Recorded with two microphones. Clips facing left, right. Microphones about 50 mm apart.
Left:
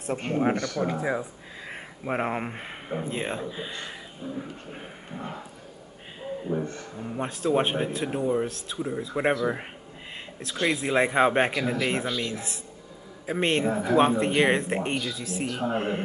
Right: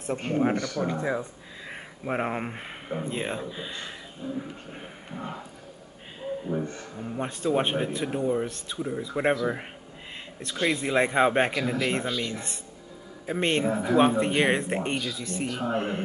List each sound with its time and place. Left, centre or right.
0.0 s speech: centre
7.0 s speech: centre